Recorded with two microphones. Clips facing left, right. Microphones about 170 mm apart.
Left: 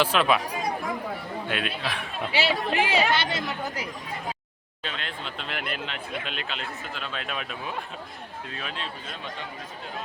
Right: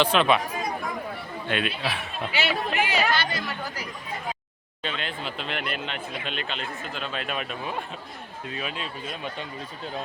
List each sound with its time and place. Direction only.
0.0 s speech: 5° left (ahead or behind)
1.5 s speech: 5° left (ahead or behind)
2.3 s speech: 30° left (ahead or behind)
4.8 s speech: centre (ahead or behind)